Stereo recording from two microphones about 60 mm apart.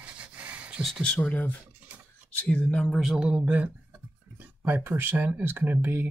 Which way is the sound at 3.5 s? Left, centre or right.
Right.